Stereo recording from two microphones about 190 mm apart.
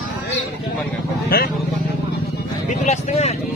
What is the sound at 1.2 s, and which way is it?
Speech, 55° left (ahead or behind).